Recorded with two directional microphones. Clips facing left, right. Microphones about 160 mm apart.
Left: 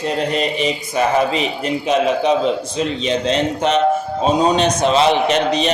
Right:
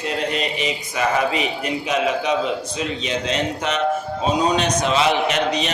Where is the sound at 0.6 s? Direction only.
35° left (ahead or behind).